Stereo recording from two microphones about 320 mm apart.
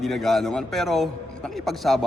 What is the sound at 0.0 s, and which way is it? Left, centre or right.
A man's voice, centre.